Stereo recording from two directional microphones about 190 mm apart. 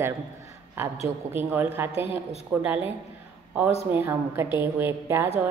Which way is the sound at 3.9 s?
10° right (ahead or behind).